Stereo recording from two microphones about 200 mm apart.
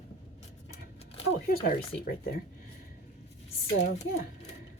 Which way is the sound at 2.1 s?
50° left (ahead or behind).